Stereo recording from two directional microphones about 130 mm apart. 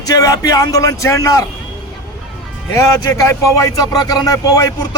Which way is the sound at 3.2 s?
25° left (ahead or behind).